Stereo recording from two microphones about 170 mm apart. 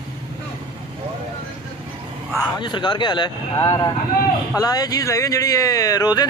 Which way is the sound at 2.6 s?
25° left (ahead or behind).